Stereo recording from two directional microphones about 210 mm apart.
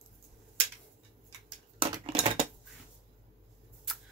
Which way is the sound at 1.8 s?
25° right (ahead or behind).